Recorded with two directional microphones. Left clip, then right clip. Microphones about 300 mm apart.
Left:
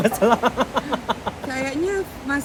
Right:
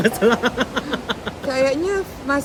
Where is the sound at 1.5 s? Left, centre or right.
Centre.